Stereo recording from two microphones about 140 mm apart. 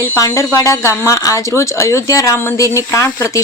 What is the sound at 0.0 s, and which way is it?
Speech, 20° left (ahead or behind).